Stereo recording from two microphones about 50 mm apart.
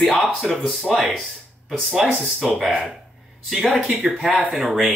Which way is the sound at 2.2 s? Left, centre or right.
Centre.